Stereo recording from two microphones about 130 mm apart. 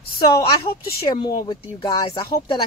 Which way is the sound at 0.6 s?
40° left (ahead or behind).